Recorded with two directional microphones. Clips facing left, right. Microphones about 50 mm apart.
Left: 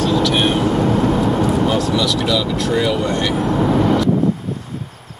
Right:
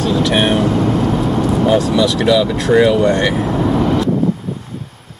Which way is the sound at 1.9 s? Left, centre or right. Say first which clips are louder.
Right 4 dB; centre.